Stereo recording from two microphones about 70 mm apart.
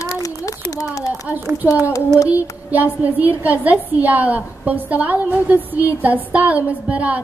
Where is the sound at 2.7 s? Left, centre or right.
Right.